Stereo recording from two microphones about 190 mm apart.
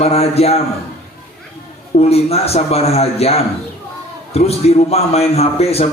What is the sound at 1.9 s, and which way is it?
A man's voice, 35° left (ahead or behind).